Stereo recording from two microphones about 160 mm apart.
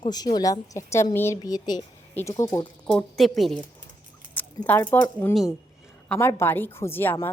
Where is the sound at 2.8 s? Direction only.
5° left (ahead or behind).